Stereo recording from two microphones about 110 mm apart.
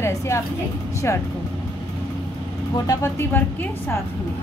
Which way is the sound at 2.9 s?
25° left (ahead or behind).